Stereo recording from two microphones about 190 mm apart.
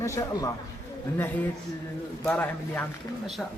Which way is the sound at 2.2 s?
5° left (ahead or behind).